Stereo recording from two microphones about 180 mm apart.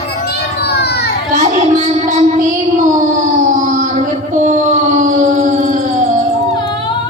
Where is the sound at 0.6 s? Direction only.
65° left (ahead or behind).